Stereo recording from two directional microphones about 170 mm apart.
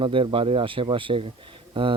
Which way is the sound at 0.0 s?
30° right (ahead or behind).